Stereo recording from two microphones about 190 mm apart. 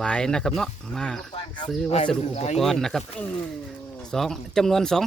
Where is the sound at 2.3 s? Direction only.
35° left (ahead or behind).